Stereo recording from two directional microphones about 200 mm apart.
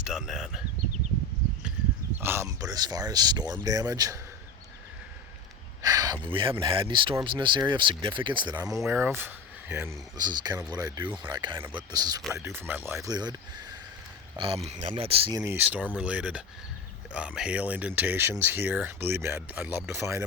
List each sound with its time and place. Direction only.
0.0 s speech: 5° right (ahead or behind)
2.2 s speech: 15° right (ahead or behind)
5.8 s speech: 15° right (ahead or behind)
14.3 s speech: 25° right (ahead or behind)
15.4 s speech: 10° right (ahead or behind)